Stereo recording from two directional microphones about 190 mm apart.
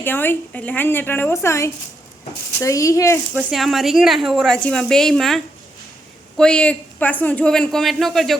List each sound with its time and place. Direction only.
0.0 s a woman's voice: 10° left (ahead or behind)
3.3 s a woman's voice: centre (ahead or behind)